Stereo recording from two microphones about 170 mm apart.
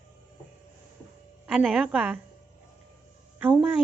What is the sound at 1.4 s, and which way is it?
Speech, 5° right (ahead or behind).